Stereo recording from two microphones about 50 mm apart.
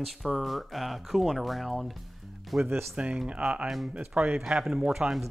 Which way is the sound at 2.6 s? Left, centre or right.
Right.